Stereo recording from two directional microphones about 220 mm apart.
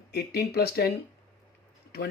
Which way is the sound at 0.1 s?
45° left (ahead or behind).